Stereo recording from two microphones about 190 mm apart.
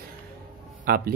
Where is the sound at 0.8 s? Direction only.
50° right (ahead or behind).